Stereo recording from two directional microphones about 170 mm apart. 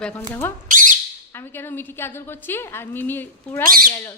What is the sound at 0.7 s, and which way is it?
Bird, 50° right (ahead or behind).